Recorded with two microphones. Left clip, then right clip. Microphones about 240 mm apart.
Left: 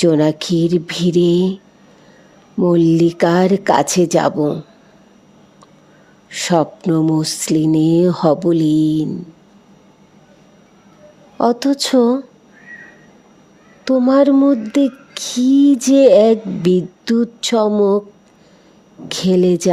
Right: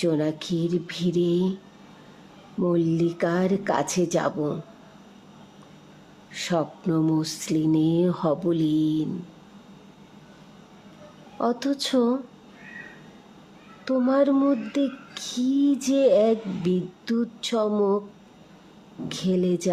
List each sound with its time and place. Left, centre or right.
0.0 s speech: left
2.6 s speech: left
6.3 s speech: left
11.3 s speech: left
13.8 s speech: left
19.0 s speech: left